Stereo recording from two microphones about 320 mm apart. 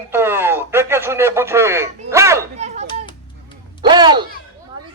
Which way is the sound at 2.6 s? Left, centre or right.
Right.